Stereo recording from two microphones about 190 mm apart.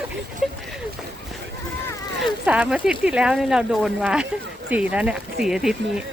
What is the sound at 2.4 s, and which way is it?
Speech, 5° right (ahead or behind).